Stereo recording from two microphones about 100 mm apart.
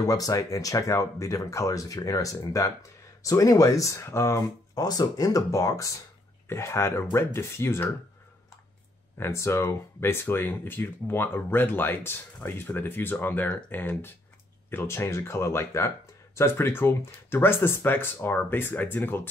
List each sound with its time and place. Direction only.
0.0 s speech: 35° left (ahead or behind)
9.2 s speech: 25° left (ahead or behind)